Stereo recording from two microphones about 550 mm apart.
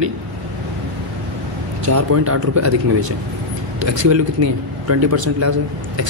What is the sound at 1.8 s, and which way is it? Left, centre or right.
Speech, right.